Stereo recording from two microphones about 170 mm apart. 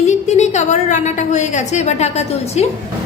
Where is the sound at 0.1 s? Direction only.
40° left (ahead or behind).